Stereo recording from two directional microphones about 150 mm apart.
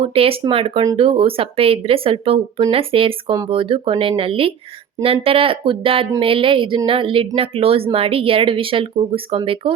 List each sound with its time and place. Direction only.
0.0 s speech: 40° right (ahead or behind)